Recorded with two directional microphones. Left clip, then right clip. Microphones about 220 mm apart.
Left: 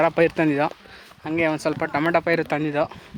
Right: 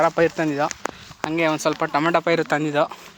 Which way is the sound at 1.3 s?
5° left (ahead or behind).